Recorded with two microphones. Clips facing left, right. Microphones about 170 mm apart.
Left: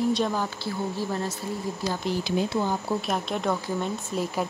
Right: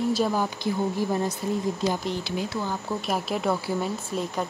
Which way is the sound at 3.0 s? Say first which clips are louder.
Right 1 dB; 5° right (ahead or behind).